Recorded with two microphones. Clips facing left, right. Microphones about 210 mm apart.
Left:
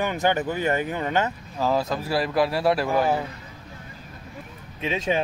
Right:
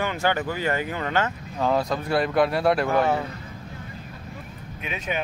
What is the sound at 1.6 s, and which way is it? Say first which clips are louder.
A man's voice: even; centre (ahead or behind).